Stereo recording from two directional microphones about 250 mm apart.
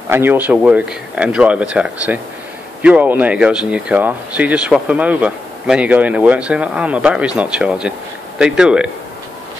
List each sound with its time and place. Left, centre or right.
0.1 s speech: centre